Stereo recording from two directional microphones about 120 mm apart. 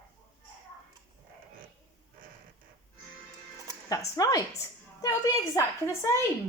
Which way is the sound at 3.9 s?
30° left (ahead or behind).